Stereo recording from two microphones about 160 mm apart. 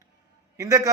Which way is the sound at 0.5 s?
20° right (ahead or behind).